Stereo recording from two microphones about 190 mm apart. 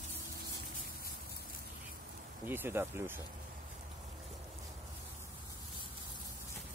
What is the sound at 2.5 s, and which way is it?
Speech, 10° right (ahead or behind).